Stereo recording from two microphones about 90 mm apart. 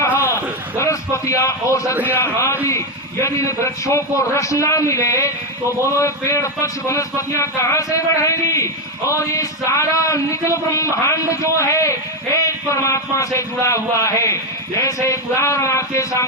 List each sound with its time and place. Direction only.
0.8 s speech: 35° left (ahead or behind)